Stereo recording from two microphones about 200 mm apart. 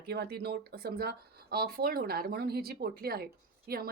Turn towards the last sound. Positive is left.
turn(degrees=-50)  # may be behind; listen again after turning